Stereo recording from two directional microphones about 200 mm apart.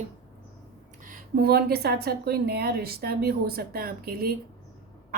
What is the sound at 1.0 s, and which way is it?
A woman's voice, 45° right (ahead or behind).